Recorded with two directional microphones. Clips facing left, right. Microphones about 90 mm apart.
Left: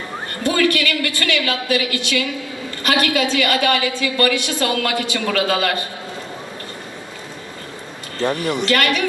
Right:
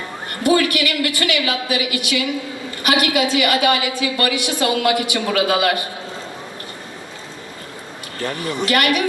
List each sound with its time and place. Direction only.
0.4 s a woman's voice: 15° right (ahead or behind)
8.2 s speech: 30° left (ahead or behind)
8.6 s a woman's voice: 15° right (ahead or behind)